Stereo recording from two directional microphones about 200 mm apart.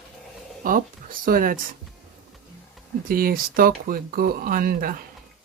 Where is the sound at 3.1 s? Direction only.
45° right (ahead or behind).